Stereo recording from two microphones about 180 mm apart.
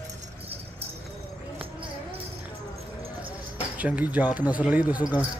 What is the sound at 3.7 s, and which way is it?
Speech, 10° right (ahead or behind).